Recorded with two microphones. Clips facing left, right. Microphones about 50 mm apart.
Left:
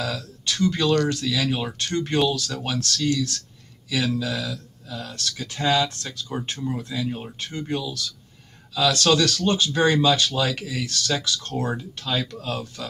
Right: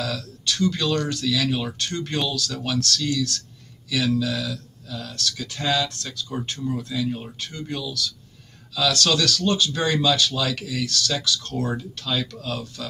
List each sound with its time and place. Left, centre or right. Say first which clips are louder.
0.0 s speech: even; left
7.3 s speech: left 3 dB; left